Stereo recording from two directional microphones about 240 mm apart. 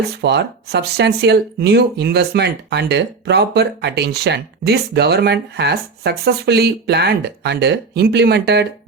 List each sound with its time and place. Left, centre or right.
0.2 s speech: right